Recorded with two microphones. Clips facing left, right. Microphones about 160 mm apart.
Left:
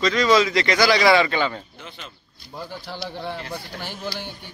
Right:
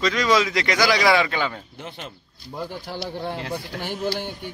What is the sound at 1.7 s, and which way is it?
Speech, 55° right (ahead or behind).